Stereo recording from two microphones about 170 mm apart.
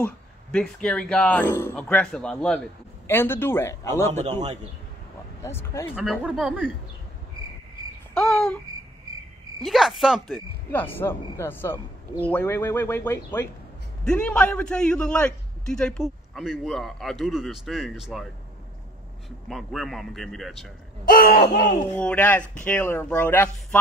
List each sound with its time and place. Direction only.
0.0 s speech: 5° left (ahead or behind)
3.9 s a man's voice: 40° right (ahead or behind)
5.4 s speech: 15° left (ahead or behind)
5.9 s speech: 5° right (ahead or behind)
8.1 s babbling: 5° left (ahead or behind)
9.6 s a man's voice: centre (ahead or behind)
10.7 s a man's voice: 10° left (ahead or behind)
19.4 s a man's voice: centre (ahead or behind)
21.1 s a sound: 65° left (ahead or behind)
21.9 s speech: 10° left (ahead or behind)